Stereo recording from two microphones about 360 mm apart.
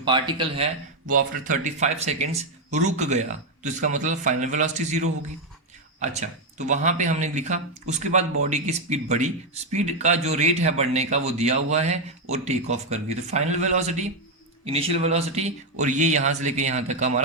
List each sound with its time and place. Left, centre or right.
0.0 s a man's voice: centre